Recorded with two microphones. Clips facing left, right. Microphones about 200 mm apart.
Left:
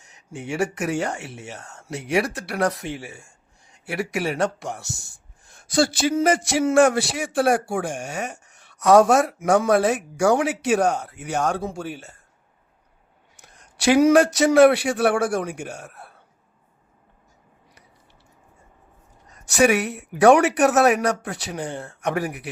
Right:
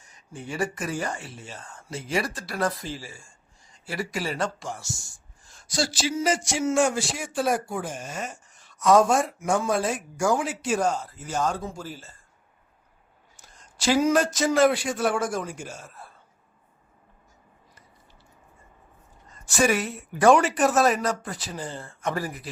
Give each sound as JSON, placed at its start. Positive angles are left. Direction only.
{"t": 0.0, "sound": "speech", "side_deg": 75}
{"t": 13.3, "sound": "speech", "side_deg": 60}
{"t": 19.3, "sound": "speech", "side_deg": 65}